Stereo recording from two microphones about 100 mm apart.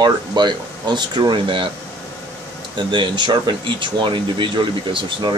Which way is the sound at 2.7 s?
55° right (ahead or behind).